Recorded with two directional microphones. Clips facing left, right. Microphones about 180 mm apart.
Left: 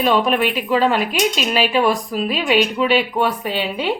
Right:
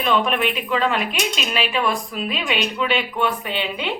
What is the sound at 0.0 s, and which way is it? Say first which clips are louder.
A woman's voice: left 4 dB; 35° left (ahead or behind).